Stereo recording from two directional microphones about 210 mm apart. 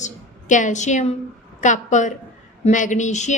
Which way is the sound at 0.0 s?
35° left (ahead or behind).